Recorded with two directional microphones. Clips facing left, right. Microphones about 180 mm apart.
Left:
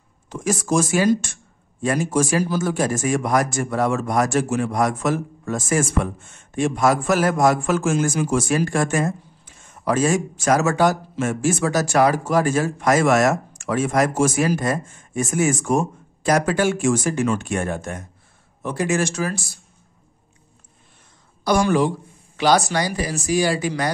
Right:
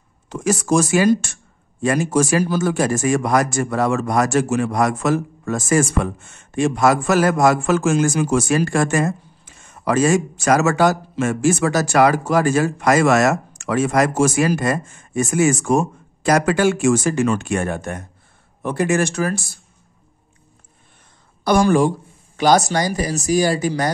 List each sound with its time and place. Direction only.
0.3 s speech: 75° right (ahead or behind); by 19.6 s 55° right (ahead or behind)
21.5 s speech: 50° right (ahead or behind)